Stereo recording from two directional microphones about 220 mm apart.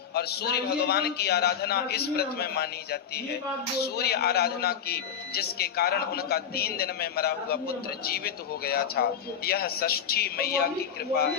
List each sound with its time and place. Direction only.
0.1 s a man's voice: 45° left (ahead or behind)